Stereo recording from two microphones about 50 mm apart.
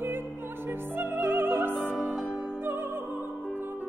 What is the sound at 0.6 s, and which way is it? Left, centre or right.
Music, right.